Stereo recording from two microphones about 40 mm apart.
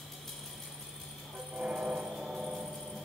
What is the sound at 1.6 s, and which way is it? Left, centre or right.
Music, right.